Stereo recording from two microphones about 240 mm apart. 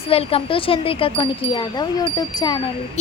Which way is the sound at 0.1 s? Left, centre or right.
Left.